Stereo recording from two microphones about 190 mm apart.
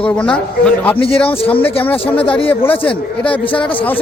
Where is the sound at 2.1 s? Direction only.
10° left (ahead or behind).